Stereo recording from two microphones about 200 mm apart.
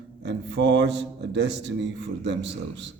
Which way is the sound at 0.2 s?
60° right (ahead or behind).